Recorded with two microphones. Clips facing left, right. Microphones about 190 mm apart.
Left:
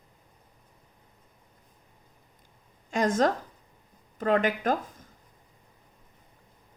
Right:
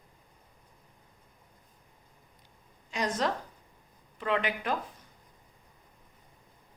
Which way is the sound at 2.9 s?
50° left (ahead or behind).